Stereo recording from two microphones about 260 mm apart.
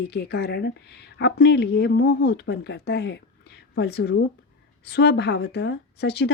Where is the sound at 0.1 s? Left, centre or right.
Left.